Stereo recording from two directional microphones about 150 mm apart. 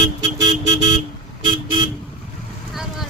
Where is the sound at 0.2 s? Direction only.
25° right (ahead or behind).